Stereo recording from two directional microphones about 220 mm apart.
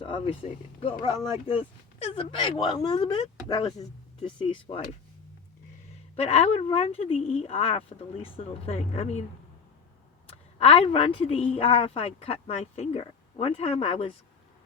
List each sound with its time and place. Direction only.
0.0 s speech: 25° left (ahead or behind)
6.1 s speech: 25° left (ahead or behind)
10.2 s speech: 25° left (ahead or behind)